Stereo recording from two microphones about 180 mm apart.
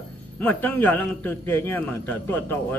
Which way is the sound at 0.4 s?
10° left (ahead or behind).